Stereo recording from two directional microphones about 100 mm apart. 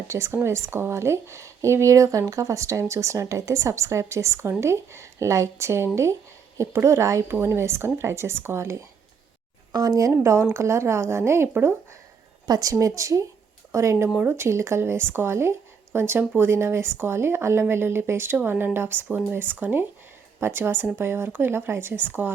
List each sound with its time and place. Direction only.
0.1 s speech: 30° right (ahead or behind)
12.5 s speech: 35° right (ahead or behind); by 22.3 s 20° right (ahead or behind)